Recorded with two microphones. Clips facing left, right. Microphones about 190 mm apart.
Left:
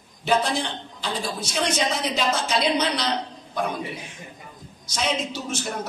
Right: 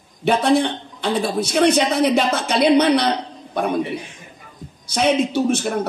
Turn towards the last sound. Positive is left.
turn(degrees=-60)  # may be behind; listen again after turning